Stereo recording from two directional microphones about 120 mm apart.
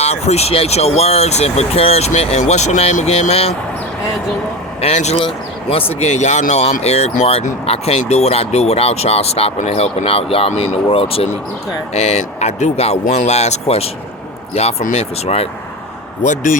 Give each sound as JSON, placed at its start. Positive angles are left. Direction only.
{"t": 0.0, "sound": "speech", "side_deg": 60}
{"t": 4.8, "sound": "speech", "side_deg": 65}
{"t": 5.2, "sound": "speech", "side_deg": 50}
{"t": 6.0, "sound": "speech", "side_deg": 75}
{"t": 11.9, "sound": "speech", "side_deg": 70}
{"t": 16.2, "sound": "speech", "side_deg": 90}